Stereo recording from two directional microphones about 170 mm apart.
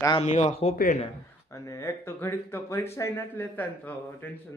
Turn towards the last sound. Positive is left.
turn(degrees=10)  # may be behind; listen again after turning